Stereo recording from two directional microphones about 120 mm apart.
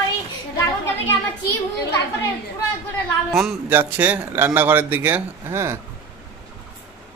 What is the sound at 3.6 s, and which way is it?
Speech, 15° right (ahead or behind).